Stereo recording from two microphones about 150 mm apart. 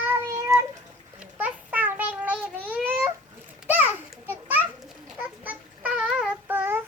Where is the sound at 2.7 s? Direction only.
10° right (ahead or behind).